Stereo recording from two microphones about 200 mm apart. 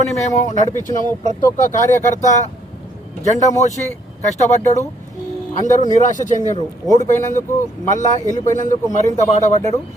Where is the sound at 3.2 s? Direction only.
35° left (ahead or behind).